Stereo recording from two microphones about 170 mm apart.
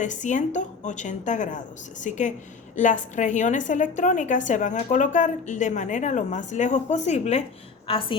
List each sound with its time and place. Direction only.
0.0 s a woman's voice: 45° left (ahead or behind)